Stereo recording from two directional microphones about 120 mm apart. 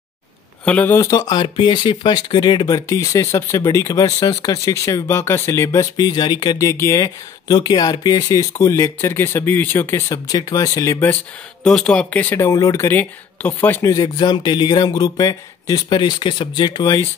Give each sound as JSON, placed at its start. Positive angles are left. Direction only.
{"t": 0.7, "sound": "speech", "side_deg": 15}
{"t": 5.9, "sound": "speech", "side_deg": 35}
{"t": 11.6, "sound": "speech", "side_deg": 5}
{"t": 13.9, "sound": "speech", "side_deg": 40}